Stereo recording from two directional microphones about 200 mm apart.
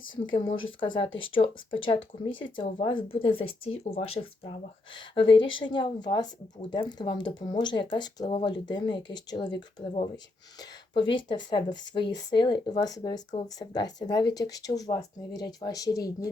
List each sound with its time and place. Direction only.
0.0 s speech: 25° left (ahead or behind)